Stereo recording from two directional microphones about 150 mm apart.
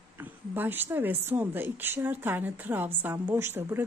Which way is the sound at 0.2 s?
15° right (ahead or behind).